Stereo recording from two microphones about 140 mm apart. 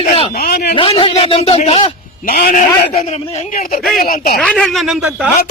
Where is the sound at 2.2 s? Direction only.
90° left.